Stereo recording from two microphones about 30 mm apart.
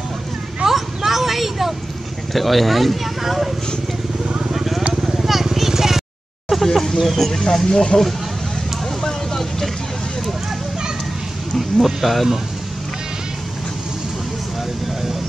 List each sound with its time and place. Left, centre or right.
0.7 s a sound: centre
2.3 s speech: centre
5.0 s vehicle: centre
6.5 s a sound: centre
7.0 s speech: centre
7.7 s speech: left
9.0 s vehicle: centre
11.5 s speech: centre